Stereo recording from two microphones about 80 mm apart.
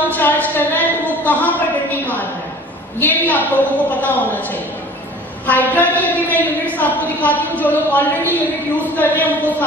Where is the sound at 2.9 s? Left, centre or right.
Left.